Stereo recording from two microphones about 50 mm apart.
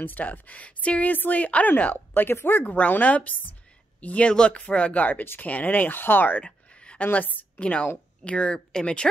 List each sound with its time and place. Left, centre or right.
0.0 s a woman's voice: left
2.2 s speech: left
2.6 s a woman's voice: left
4.3 s speech: centre
5.2 s speech: left
5.5 s a woman's voice: left
6.4 s a sound: left
7.1 s a woman's voice: left; by 9.1 s centre